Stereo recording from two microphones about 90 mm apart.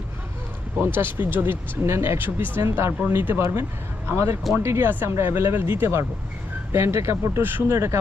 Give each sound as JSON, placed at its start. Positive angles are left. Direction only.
{"t": 0.9, "sound": "speech", "side_deg": -25}